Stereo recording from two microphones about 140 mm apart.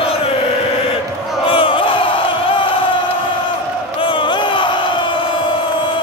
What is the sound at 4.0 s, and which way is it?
Crowd, 35° left (ahead or behind).